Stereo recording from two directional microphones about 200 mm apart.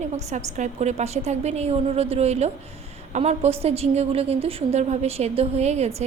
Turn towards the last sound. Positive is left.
turn(degrees=-35)  # may be behind; listen again after turning